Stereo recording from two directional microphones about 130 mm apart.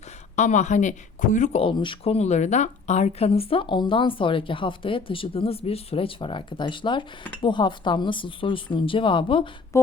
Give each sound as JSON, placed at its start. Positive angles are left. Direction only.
{"t": 0.3, "sound": "speech", "side_deg": 65}
{"t": 1.6, "sound": "speech", "side_deg": 40}
{"t": 9.7, "sound": "a sound", "side_deg": 20}